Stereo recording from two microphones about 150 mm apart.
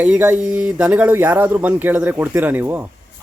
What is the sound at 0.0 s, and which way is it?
Speech, 10° right (ahead or behind).